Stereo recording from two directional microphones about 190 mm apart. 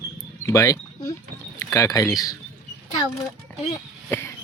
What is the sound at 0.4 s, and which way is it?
Speech, 15° left (ahead or behind).